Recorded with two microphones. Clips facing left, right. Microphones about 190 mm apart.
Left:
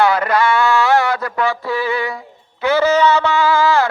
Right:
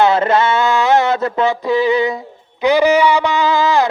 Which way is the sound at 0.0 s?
25° right (ahead or behind).